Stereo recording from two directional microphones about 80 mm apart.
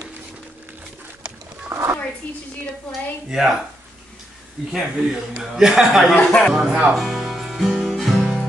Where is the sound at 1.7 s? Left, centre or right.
Right.